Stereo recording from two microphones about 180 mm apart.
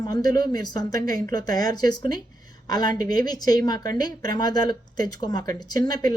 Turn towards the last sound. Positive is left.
turn(degrees=20)  # may be behind; listen again after turning